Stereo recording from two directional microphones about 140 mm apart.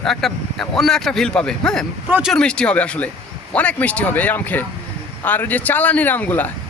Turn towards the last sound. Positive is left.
turn(degrees=10)  # may be behind; listen again after turning